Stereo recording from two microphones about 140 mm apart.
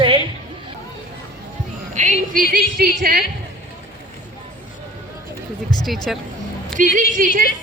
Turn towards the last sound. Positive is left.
turn(degrees=-70)  # may be behind; listen again after turning